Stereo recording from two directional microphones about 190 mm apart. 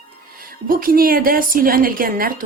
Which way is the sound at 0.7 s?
50° right (ahead or behind).